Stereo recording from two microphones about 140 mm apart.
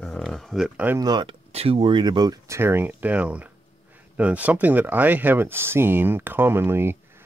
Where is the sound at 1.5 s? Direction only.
45° right (ahead or behind).